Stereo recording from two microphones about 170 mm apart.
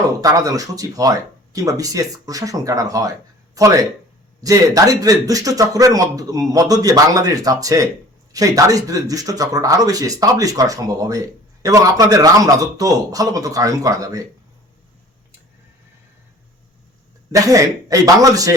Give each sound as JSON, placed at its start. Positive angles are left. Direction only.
{"t": 0.2, "sound": "a man's voice", "side_deg": -20}
{"t": 17.3, "sound": "a man's voice", "side_deg": -20}